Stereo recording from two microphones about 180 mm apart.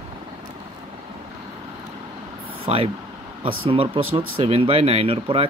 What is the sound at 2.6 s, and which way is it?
Speech, 30° right (ahead or behind).